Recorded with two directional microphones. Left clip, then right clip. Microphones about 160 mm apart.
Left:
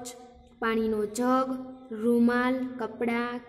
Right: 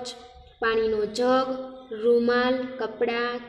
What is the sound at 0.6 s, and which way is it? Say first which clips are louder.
A woman's voice: right 4 dB; 35° left (ahead or behind).